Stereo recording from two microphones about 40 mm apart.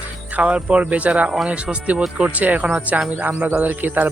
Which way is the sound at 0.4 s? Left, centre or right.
Right.